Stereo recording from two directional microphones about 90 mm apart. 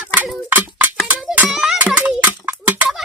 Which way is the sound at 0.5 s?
20° right (ahead or behind).